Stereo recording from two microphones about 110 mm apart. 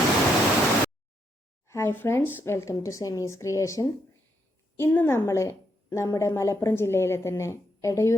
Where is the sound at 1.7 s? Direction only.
20° left (ahead or behind).